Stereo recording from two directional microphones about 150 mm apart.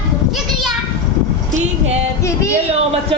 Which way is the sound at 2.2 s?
20° left (ahead or behind).